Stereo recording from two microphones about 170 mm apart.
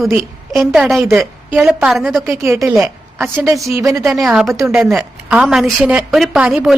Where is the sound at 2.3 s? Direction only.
15° right (ahead or behind).